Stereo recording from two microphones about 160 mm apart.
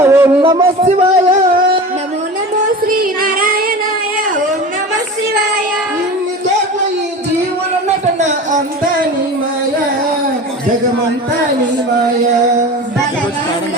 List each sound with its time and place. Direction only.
0.0 s a sound: 15° right (ahead or behind)
0.4 s a man's voice: 35° right (ahead or behind)
2.8 s music: 60° right (ahead or behind)